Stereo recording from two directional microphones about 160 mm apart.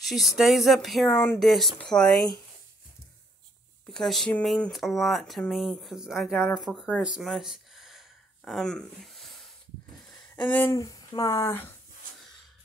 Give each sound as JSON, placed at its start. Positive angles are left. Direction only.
{"t": 0.0, "sound": "speech", "side_deg": 0}
{"t": 3.8, "sound": "speech", "side_deg": 5}